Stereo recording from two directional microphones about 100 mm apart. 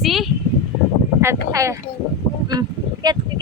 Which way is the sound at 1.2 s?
30° right (ahead or behind).